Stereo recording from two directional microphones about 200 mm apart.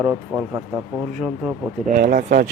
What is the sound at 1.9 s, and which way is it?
Speech, 40° right (ahead or behind).